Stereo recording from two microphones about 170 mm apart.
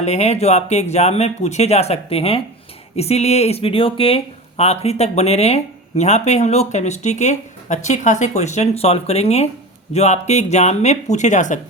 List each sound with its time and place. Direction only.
0.0 s speech: 40° left (ahead or behind)